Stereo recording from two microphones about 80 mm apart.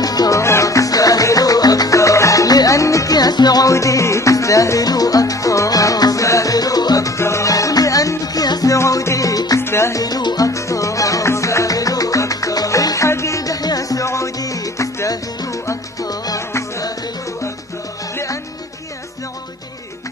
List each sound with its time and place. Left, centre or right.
0.0 s music: left
0.4 s music: left
3.7 s music: left
8.7 s music: left
9.6 s music: left
10.0 s music: left
18.1 s music: left